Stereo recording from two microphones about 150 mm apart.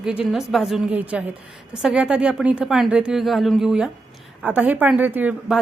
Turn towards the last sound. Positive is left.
turn(degrees=-10)  # may be behind; listen again after turning